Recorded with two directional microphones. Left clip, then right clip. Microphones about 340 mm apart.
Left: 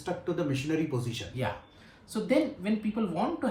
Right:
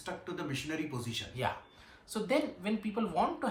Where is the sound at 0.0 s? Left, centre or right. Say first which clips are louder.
Left 8 dB; centre.